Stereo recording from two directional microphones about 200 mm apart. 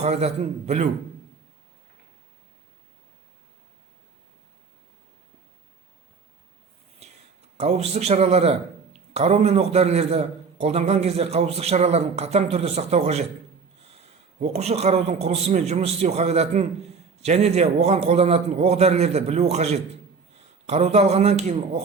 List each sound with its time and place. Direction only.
0.0 s speech: 35° right (ahead or behind)
7.0 s a sound: 35° right (ahead or behind)
7.5 s speech: 30° right (ahead or behind)
14.3 s speech: 30° right (ahead or behind)